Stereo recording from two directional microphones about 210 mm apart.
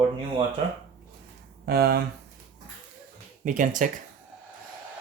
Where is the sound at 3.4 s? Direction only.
40° right (ahead or behind).